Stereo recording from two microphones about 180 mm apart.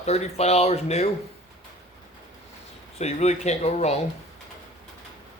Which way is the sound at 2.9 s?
35° left (ahead or behind).